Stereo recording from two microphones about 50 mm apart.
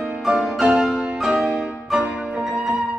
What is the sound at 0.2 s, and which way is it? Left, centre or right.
Music, centre.